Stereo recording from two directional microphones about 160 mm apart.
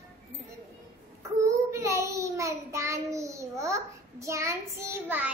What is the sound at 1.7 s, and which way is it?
A child's voice, 20° right (ahead or behind).